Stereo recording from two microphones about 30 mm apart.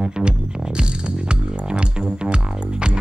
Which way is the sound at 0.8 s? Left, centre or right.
Right.